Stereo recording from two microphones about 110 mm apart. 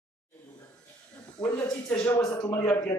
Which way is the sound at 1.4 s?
10° left (ahead or behind).